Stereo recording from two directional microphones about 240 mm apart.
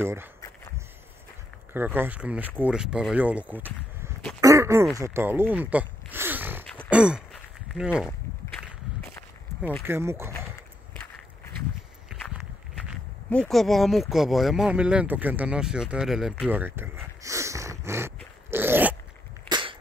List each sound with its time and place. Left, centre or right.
0.0 s speech: centre
1.7 s speech: centre
4.4 s a sound: centre
4.9 s speech: centre
6.6 s a sound: centre
8.5 s walk: centre
9.8 s speech: centre
12.1 s walk: centre
12.8 s speech: centre
19.5 s a sound: right